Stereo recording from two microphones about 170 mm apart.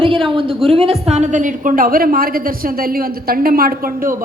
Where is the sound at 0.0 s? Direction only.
30° right (ahead or behind).